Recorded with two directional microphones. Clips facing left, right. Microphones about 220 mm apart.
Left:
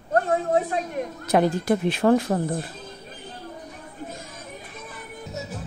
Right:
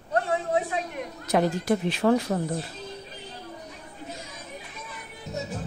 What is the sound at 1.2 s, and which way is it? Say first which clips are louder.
A woman's voice: left 3 dB; 55° left (ahead or behind).